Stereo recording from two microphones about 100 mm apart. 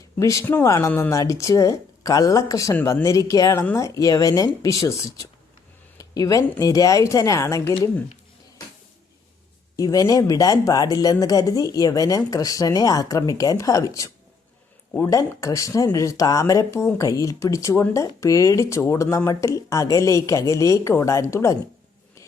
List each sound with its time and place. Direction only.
0.2 s speech: 35° left (ahead or behind)
6.0 s a sound: 35° left (ahead or behind)
6.6 s speech: 35° left (ahead or behind)
9.7 s speech: 35° left (ahead or behind)